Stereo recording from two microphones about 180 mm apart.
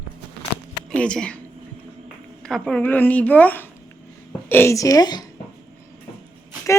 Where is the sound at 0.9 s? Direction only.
5° left (ahead or behind).